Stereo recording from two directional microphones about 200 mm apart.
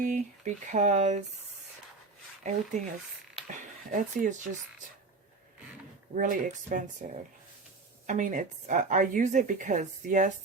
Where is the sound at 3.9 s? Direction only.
40° right (ahead or behind).